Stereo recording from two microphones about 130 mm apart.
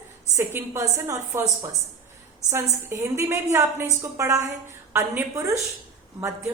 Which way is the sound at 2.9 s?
20° right (ahead or behind).